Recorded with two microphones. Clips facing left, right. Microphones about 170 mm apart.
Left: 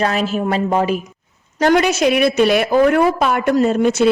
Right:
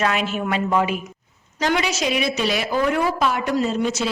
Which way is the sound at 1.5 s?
50° left (ahead or behind).